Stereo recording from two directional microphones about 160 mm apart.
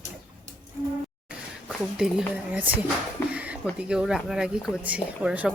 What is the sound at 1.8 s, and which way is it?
Speech, 5° right (ahead or behind).